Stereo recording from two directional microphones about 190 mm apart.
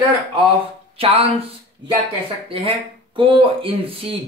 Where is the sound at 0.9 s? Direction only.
30° right (ahead or behind).